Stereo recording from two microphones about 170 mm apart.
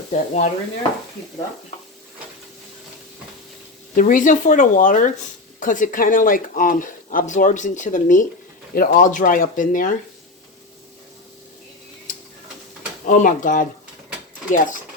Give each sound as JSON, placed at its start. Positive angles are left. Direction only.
{"t": 0.1, "sound": "speech", "side_deg": 50}
{"t": 3.9, "sound": "speech", "side_deg": 50}
{"t": 13.1, "sound": "speech", "side_deg": 50}